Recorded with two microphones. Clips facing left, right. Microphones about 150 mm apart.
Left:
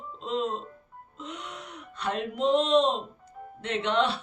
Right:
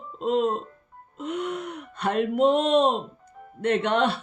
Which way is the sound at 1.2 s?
55° right (ahead or behind).